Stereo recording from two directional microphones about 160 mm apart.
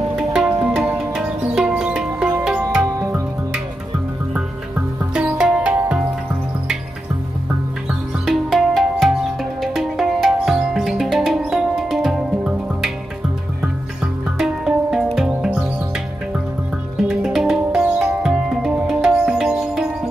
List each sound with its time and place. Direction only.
0.3 s music: 5° right (ahead or behind)
2.9 s music: 20° right (ahead or behind)
4.3 s music: 10° right (ahead or behind)
8.3 s music: centre (ahead or behind)
14.4 s music: 5° right (ahead or behind)
16.9 s music: 5° right (ahead or behind)